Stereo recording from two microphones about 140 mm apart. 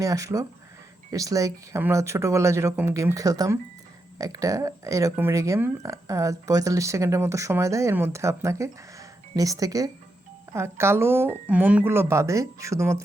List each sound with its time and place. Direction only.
0.0 s speech: 25° right (ahead or behind)